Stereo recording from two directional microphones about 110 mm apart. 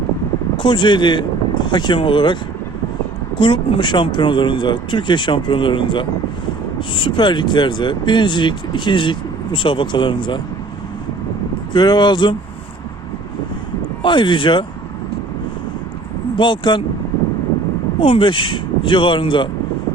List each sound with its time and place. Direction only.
0.6 s speech: 45° left (ahead or behind)
11.7 s speech: 40° left (ahead or behind)
14.0 s speech: 45° left (ahead or behind)
16.4 s speech: 45° left (ahead or behind)
18.0 s speech: 50° left (ahead or behind)